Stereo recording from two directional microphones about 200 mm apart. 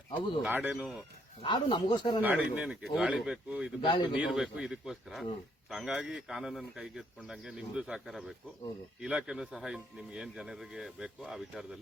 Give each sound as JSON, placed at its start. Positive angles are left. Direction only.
{"t": 0.4, "sound": "speech", "side_deg": -5}
{"t": 1.4, "sound": "speech", "side_deg": 25}
{"t": 2.2, "sound": "speech", "side_deg": -10}
{"t": 3.8, "sound": "speech", "side_deg": 20}
{"t": 4.1, "sound": "speech", "side_deg": 0}